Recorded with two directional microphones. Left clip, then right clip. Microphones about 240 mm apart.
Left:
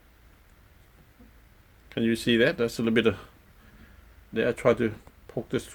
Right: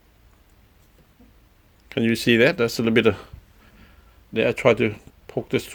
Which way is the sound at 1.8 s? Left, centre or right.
Right.